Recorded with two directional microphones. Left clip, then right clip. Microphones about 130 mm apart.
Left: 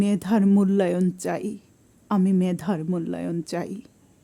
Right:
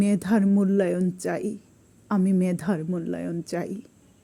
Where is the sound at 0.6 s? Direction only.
15° left (ahead or behind).